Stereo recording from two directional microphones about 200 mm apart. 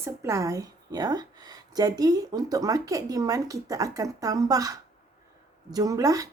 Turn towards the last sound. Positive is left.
turn(degrees=-15)  # may be behind; listen again after turning